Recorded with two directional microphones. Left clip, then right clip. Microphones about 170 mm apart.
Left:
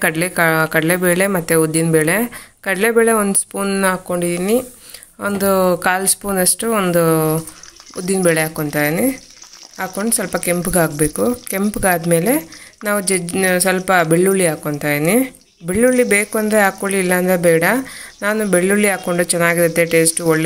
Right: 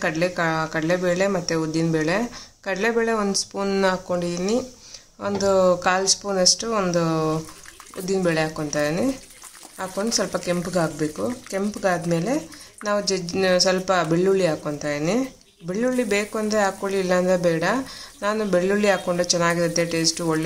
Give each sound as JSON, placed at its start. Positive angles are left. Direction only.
{"t": 0.0, "sound": "speech", "side_deg": 25}